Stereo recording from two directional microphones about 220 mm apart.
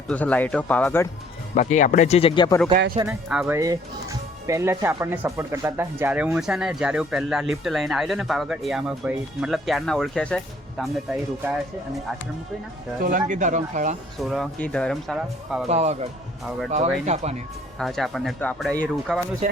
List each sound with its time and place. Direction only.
0.1 s speech: 5° left (ahead or behind)
1.5 s speech: 35° left (ahead or behind)
2.9 s speech: 15° right (ahead or behind)
3.2 s speech: 5° right (ahead or behind)
13.0 s speech: 40° right (ahead or behind)
14.2 s speech: centre (ahead or behind)
15.7 s speech: 30° right (ahead or behind)
17.1 s speech: 30° right (ahead or behind)
17.7 s speech: centre (ahead or behind)
19.4 s speech: 30° right (ahead or behind)